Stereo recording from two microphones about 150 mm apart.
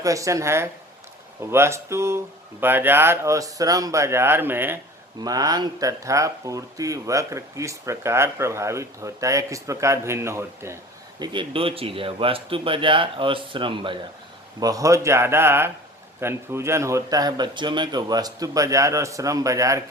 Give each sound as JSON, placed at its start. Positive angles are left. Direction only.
{"t": 0.0, "sound": "speech", "side_deg": -20}
{"t": 5.2, "sound": "speech", "side_deg": -25}
{"t": 11.2, "sound": "speech", "side_deg": -30}
{"t": 14.6, "sound": "speech", "side_deg": -25}